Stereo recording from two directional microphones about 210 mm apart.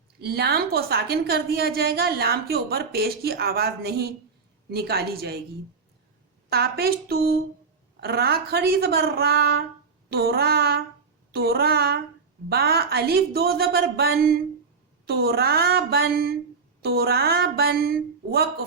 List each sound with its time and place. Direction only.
0.2 s a woman's voice: 50° right (ahead or behind)
6.5 s a woman's voice: 50° right (ahead or behind)